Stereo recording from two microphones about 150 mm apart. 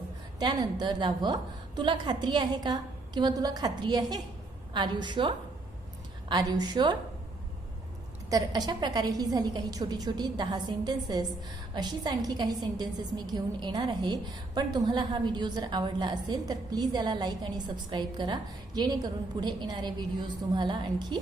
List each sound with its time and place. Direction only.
0.3 s a woman's voice: 30° right (ahead or behind)
8.3 s a woman's voice: 25° right (ahead or behind)